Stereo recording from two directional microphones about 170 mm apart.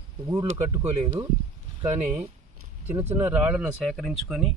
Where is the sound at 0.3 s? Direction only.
15° right (ahead or behind).